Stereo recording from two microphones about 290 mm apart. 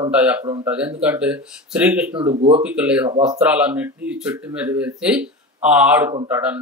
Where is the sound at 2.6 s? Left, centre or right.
Centre.